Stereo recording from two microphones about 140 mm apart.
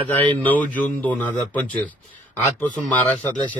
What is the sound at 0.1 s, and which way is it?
A man's voice, 10° left (ahead or behind).